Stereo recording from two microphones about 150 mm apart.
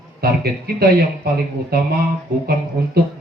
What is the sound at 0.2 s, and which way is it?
Speech, 90° right.